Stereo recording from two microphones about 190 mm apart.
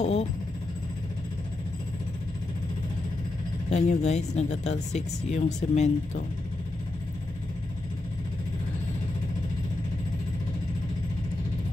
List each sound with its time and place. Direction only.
0.0 s speech: 35° left (ahead or behind)
3.7 s speech: 35° left (ahead or behind)